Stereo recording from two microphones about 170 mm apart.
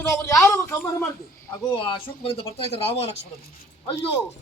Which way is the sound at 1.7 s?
30° left (ahead or behind).